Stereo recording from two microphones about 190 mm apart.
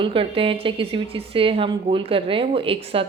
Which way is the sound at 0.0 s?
30° right (ahead or behind).